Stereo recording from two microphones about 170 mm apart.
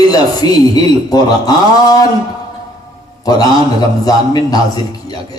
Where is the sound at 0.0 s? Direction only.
25° left (ahead or behind).